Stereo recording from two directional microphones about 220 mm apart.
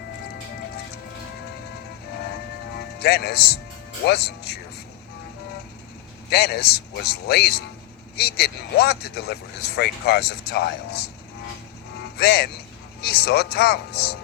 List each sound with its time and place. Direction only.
3.0 s speech: 45° left (ahead or behind)
6.3 s speech: 45° left (ahead or behind)
12.1 s a man's voice: 45° left (ahead or behind)